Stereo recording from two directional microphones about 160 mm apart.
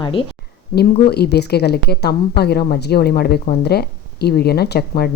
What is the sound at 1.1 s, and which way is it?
Speech, 90° left.